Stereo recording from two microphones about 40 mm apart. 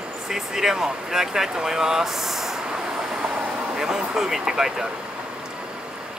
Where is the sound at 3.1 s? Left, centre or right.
Centre.